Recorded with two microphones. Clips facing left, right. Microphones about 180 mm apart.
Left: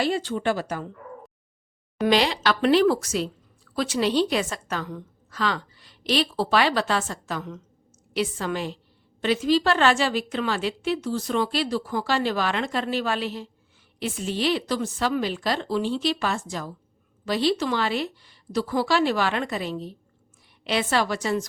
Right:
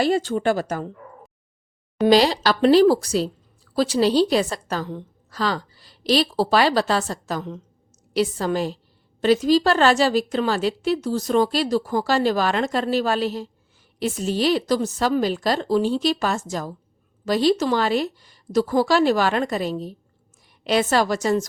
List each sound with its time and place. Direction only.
0.0 s a woman's voice: 45° right (ahead or behind)
2.0 s a woman's voice: 35° right (ahead or behind)